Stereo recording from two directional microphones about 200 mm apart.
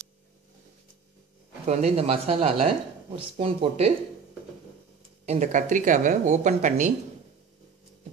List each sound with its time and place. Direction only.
1.7 s speech: 30° right (ahead or behind)
5.2 s speech: 35° right (ahead or behind)